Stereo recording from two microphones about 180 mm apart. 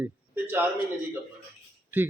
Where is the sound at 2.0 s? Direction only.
10° right (ahead or behind).